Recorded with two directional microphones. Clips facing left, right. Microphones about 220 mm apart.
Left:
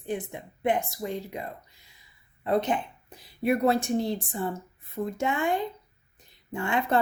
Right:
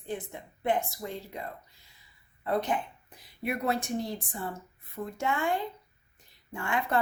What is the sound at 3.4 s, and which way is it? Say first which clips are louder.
Speech: left 7 dB; 35° left (ahead or behind).